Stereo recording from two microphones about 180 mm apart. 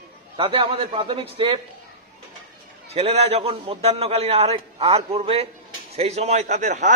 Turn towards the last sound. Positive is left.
turn(degrees=-40)  # may be behind; listen again after turning